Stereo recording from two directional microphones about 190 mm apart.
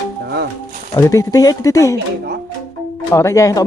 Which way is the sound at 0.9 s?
15° left (ahead or behind).